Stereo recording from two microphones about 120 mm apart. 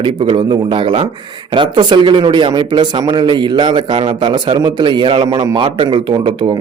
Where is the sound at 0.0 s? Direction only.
45° right (ahead or behind).